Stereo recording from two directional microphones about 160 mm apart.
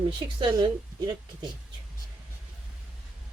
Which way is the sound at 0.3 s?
30° right (ahead or behind).